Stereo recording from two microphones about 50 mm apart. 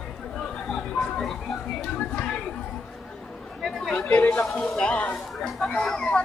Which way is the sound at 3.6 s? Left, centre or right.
Centre.